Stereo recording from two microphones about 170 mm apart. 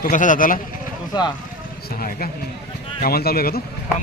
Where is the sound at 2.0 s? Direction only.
55° left (ahead or behind).